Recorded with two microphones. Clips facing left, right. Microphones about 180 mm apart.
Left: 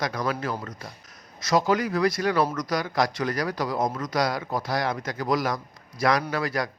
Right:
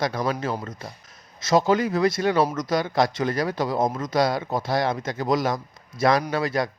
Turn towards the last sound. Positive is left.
turn(degrees=-25)  # may be behind; listen again after turning